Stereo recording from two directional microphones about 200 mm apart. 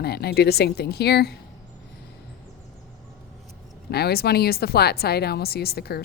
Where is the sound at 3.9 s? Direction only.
50° left (ahead or behind).